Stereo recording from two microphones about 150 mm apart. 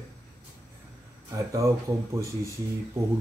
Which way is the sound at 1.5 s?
20° right (ahead or behind).